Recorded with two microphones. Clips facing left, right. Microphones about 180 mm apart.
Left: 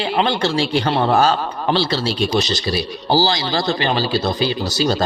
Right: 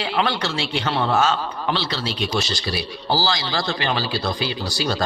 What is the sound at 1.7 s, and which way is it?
Speech, 30° left (ahead or behind).